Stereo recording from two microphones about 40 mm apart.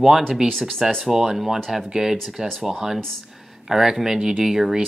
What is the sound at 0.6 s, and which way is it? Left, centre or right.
Speech, centre.